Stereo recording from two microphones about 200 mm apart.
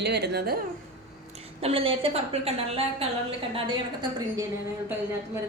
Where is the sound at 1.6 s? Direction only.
30° right (ahead or behind).